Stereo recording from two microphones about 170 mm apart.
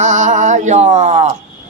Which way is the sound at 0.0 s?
45° right (ahead or behind).